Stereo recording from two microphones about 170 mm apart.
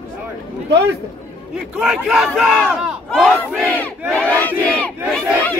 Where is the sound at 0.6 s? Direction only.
90° right.